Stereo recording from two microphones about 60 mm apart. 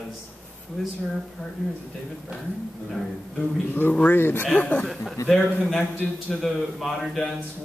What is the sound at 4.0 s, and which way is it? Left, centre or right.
Speech, left.